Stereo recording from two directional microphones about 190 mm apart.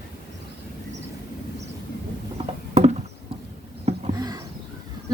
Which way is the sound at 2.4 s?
30° right (ahead or behind).